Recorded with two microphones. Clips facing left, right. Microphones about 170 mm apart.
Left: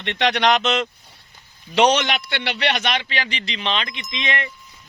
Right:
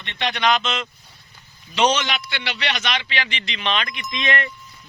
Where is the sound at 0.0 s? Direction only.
75° left (ahead or behind); by 4.4 s 20° left (ahead or behind).